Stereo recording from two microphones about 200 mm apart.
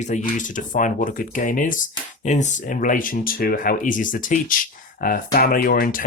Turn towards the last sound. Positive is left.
turn(degrees=45)  # may be behind; listen again after turning